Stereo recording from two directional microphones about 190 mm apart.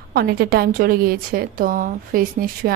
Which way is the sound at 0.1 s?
55° right (ahead or behind).